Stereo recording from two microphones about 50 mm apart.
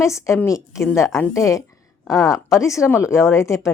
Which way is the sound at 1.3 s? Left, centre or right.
Left.